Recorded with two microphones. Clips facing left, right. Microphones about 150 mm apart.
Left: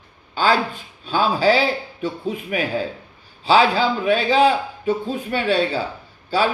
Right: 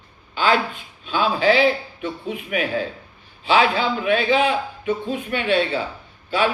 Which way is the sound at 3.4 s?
35° left (ahead or behind).